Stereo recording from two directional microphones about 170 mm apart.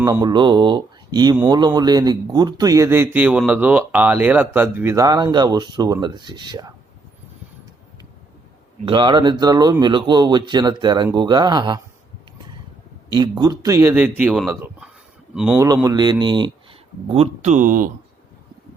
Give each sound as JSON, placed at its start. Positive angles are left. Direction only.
{"t": 0.0, "sound": "speech", "side_deg": -20}
{"t": 8.8, "sound": "speech", "side_deg": -30}
{"t": 13.1, "sound": "a man's voice", "side_deg": -25}
{"t": 15.5, "sound": "speech", "side_deg": -20}
{"t": 17.1, "sound": "speech", "side_deg": -40}